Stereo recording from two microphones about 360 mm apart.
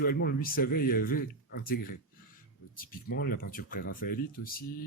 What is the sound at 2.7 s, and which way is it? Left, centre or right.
Speech, left.